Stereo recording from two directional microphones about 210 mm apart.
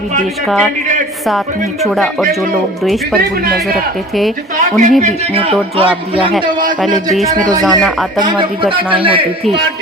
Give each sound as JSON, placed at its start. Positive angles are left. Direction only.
{"t": 0.4, "sound": "speech", "side_deg": 0}
{"t": 2.8, "sound": "speech", "side_deg": 0}
{"t": 3.2, "sound": "speech", "side_deg": -45}
{"t": 4.8, "sound": "a man's voice", "side_deg": -35}
{"t": 7.6, "sound": "speech", "side_deg": 0}
{"t": 9.0, "sound": "a man's voice", "side_deg": -25}